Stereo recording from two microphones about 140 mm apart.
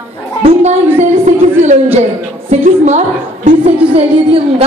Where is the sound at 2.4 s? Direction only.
55° right (ahead or behind).